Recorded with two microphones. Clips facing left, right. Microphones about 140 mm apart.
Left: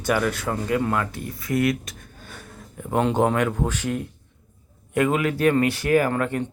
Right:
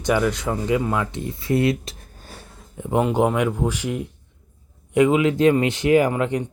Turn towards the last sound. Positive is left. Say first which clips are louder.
# right 2 dB
turn(degrees=-15)  # may be behind; listen again after turning